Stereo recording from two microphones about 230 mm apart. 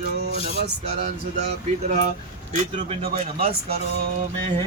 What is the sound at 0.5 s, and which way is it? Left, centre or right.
Speech, right.